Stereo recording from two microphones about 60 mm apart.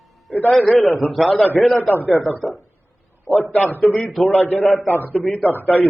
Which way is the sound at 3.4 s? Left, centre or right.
Left.